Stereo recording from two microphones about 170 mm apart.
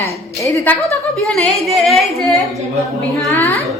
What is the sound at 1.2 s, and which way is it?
A woman's voice, 5° left (ahead or behind).